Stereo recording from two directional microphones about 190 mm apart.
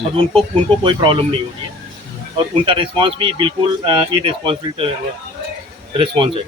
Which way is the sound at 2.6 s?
25° right (ahead or behind).